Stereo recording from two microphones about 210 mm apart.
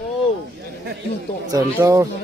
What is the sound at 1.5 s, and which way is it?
Speech, 15° right (ahead or behind).